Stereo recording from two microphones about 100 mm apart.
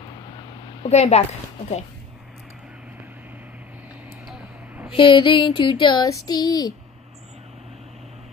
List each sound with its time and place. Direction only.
0.8 s a woman's voice: 90° left
4.9 s female singing: 55° left (ahead or behind)
6.0 s a sound: 40° left (ahead or behind)